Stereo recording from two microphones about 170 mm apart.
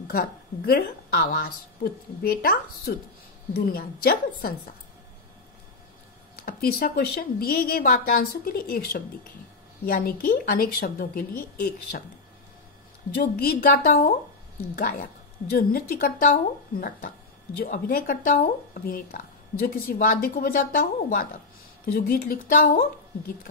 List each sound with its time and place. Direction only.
0.1 s speech: 60° left (ahead or behind)
6.3 s speech: 60° left (ahead or behind)
13.1 s speech: 60° left (ahead or behind)
17.6 s speech: 60° left (ahead or behind)